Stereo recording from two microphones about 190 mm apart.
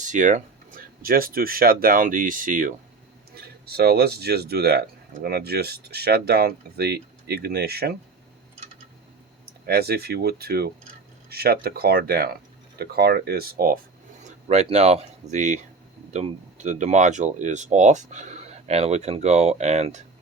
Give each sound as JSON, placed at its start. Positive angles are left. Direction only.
{"t": 0.0, "sound": "speech", "side_deg": -40}
{"t": 3.7, "sound": "speech", "side_deg": -55}
{"t": 9.6, "sound": "speech", "side_deg": -55}
{"t": 14.3, "sound": "speech", "side_deg": -35}